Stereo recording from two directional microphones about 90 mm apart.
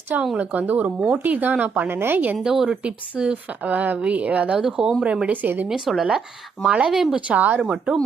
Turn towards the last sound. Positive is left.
turn(degrees=-10)  # may be behind; listen again after turning